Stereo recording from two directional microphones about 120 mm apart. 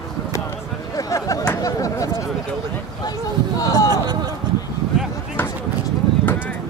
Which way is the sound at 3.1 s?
30° left (ahead or behind).